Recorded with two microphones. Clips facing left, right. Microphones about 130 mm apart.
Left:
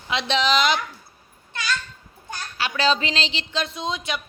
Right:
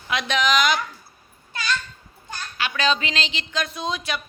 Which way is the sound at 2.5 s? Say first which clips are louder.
Left 1 dB; 30° left (ahead or behind).